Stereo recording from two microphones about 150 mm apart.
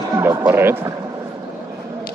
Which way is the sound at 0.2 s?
15° right (ahead or behind).